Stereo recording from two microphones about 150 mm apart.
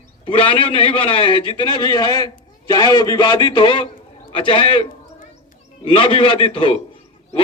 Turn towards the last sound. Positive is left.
turn(degrees=35)  # may be behind; listen again after turning